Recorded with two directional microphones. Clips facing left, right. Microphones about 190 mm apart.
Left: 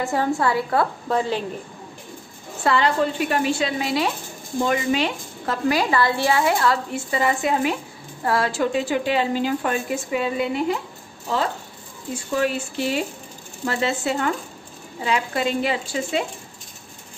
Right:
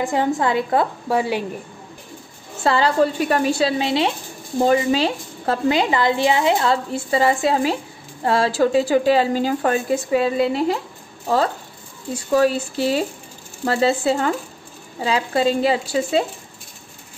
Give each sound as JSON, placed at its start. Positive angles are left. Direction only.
{"t": 0.0, "sound": "a woman's voice", "side_deg": -15}
{"t": 2.6, "sound": "a woman's voice", "side_deg": -30}
{"t": 12.4, "sound": "a woman's voice", "side_deg": -35}